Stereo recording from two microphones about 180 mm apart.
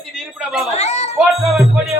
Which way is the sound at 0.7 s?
40° left (ahead or behind).